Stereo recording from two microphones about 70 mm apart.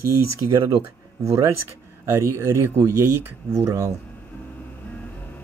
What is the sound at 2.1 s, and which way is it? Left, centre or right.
Speech, right.